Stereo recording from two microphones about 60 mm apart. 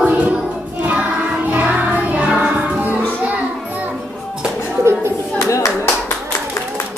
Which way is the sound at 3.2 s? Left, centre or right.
Right.